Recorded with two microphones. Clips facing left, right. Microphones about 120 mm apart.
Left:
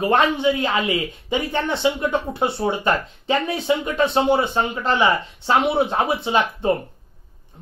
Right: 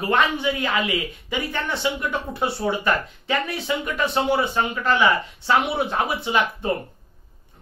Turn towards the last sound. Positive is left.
turn(degrees=25)  # may be behind; listen again after turning